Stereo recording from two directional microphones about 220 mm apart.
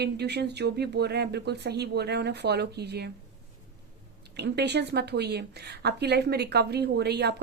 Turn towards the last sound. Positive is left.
turn(degrees=-50)  # may be behind; listen again after turning